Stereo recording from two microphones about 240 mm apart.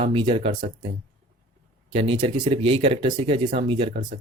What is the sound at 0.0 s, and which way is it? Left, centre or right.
Speech, right.